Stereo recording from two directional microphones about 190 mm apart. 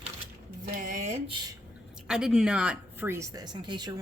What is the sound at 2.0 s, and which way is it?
Speech, 5° right (ahead or behind).